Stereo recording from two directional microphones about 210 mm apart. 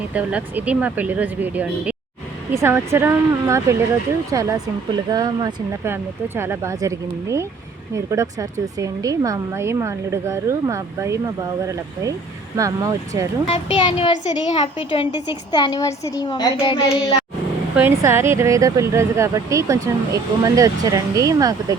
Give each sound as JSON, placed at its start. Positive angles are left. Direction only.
{"t": 0.1, "sound": "speech", "side_deg": -5}
{"t": 12.5, "sound": "speech", "side_deg": -15}
{"t": 13.5, "sound": "a child's voice", "side_deg": 25}
{"t": 17.7, "sound": "speech", "side_deg": -10}